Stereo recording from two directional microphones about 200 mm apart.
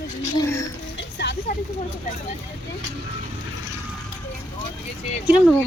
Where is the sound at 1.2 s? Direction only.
60° left (ahead or behind).